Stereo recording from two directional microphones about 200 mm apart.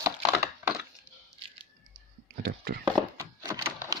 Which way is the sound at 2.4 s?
50° right (ahead or behind).